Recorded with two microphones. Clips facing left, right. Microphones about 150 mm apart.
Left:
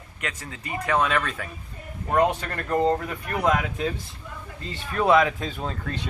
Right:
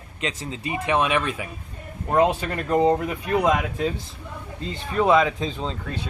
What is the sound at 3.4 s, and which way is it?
Speech, 5° right (ahead or behind).